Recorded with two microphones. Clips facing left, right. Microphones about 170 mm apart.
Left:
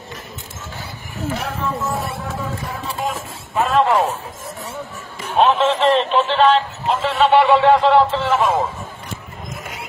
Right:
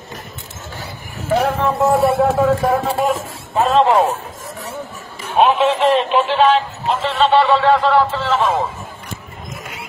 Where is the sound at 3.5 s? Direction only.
25° right (ahead or behind).